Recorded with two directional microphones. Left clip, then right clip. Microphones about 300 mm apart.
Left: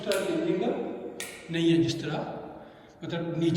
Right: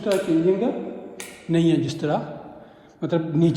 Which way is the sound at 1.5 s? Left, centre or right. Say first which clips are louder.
Right 4 dB; centre.